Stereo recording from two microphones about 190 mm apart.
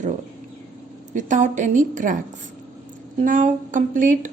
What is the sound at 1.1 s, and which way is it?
A woman's voice, 40° right (ahead or behind).